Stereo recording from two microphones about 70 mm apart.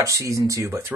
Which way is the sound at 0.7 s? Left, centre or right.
Right.